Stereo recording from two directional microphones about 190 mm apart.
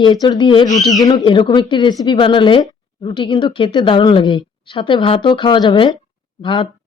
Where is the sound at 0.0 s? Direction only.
25° left (ahead or behind).